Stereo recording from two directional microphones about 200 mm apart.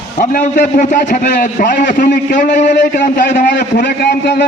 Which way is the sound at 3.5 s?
55° left (ahead or behind).